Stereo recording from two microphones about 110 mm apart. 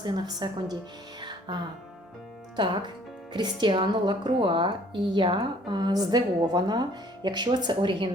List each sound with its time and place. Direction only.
0.0 s speech: 45° right (ahead or behind)
1.2 s music: 40° right (ahead or behind)
3.3 s speech: 45° right (ahead or behind)